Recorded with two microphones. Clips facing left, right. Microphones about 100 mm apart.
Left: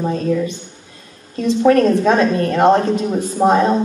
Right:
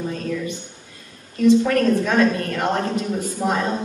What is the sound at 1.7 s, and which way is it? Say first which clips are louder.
Speech: left 6 dB; 30° left (ahead or behind).